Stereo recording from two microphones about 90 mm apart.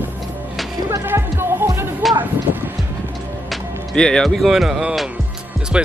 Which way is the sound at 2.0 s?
Centre (ahead or behind).